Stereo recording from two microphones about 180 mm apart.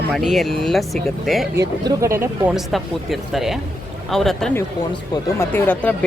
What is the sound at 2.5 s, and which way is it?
Speech, centre (ahead or behind).